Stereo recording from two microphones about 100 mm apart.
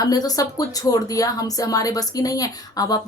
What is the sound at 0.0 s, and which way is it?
Speech, 40° left (ahead or behind).